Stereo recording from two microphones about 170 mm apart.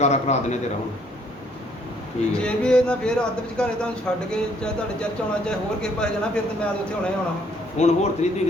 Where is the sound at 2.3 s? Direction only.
5° left (ahead or behind).